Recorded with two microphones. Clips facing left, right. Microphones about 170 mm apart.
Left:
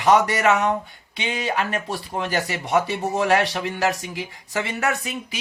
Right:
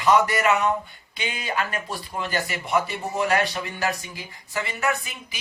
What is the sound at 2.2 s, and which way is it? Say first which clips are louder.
Speech: left 2 dB; 70° left (ahead or behind).